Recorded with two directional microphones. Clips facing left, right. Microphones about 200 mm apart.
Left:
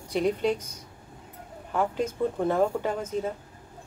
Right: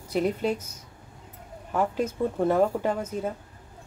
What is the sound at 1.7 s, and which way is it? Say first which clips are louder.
Speech: right 1 dB; 10° right (ahead or behind).